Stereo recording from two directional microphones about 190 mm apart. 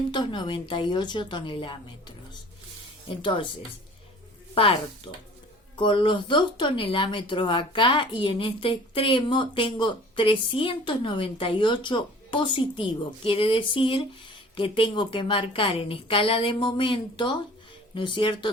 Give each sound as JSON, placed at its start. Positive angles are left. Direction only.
{"t": 0.1, "sound": "speech", "side_deg": 25}
{"t": 4.5, "sound": "speech", "side_deg": 30}